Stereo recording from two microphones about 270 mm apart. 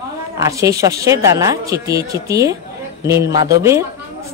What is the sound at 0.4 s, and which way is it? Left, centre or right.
Speech, centre.